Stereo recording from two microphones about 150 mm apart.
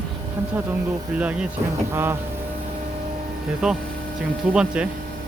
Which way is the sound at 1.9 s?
15° right (ahead or behind).